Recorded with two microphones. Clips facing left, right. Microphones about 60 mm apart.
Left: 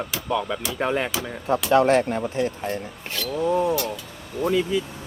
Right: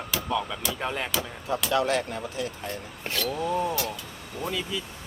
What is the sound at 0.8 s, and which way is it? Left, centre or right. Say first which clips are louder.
Speech: left 8 dB; left.